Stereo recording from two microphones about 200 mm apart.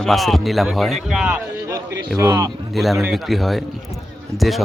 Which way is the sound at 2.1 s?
15° right (ahead or behind).